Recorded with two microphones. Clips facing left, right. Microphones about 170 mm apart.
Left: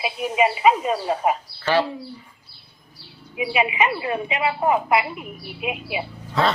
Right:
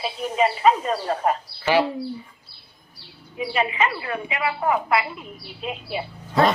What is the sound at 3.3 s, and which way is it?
A woman's voice, 10° left (ahead or behind).